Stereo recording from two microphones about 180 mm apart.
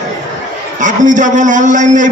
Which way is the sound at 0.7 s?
45° right (ahead or behind).